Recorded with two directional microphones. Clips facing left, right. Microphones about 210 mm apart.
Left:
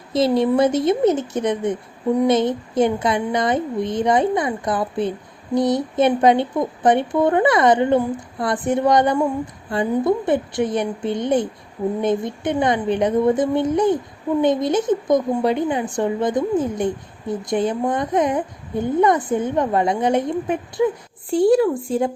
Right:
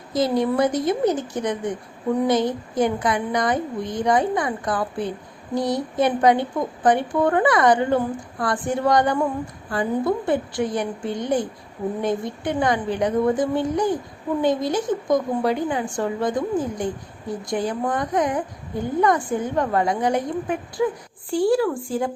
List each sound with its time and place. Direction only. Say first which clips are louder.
0.1 s a woman's voice: left 4 dB; 25° left (ahead or behind)